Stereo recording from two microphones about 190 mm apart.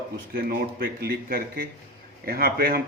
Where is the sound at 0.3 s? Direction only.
50° right (ahead or behind).